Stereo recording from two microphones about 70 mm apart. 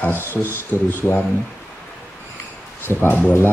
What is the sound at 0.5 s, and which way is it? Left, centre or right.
Speech, left.